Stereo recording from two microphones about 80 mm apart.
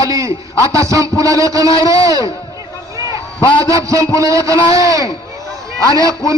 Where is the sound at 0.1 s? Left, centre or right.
Right.